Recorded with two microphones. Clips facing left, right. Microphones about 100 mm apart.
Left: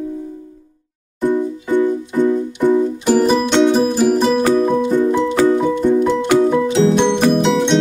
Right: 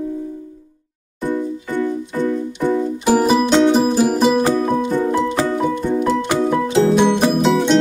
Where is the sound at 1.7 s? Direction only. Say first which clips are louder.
Left 6 dB; 15° left (ahead or behind).